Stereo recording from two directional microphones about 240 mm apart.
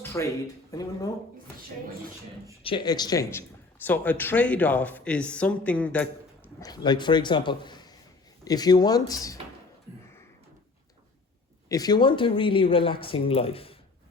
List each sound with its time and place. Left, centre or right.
0.0 s a sound: centre
0.7 s speech: centre
2.6 s speech: centre
6.6 s speech: centre
11.7 s speech: centre